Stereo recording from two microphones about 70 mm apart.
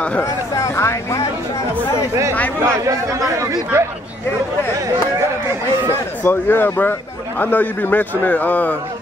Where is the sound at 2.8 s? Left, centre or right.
Right.